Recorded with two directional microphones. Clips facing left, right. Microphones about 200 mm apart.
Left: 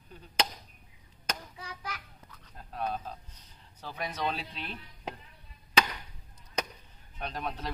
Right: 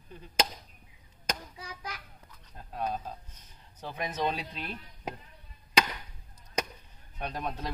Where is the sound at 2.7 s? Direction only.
15° right (ahead or behind).